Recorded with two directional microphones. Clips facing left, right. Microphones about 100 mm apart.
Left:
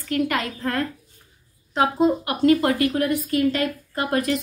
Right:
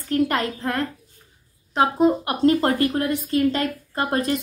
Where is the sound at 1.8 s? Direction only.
25° right (ahead or behind).